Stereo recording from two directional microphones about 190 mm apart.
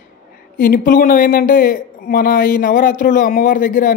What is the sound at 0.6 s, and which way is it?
Speech, 50° left (ahead or behind).